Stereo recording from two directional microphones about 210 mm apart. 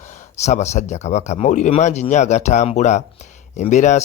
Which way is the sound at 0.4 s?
30° left (ahead or behind).